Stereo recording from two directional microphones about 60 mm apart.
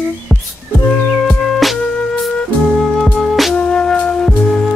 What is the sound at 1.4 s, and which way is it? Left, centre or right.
Music, centre.